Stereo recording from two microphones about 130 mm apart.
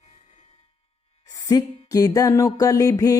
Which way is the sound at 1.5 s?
30° left (ahead or behind).